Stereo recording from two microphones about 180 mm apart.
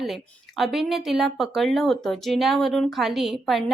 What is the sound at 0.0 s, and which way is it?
Speech, centre (ahead or behind).